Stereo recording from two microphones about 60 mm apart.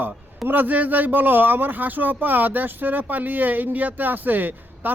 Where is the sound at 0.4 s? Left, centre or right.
Right.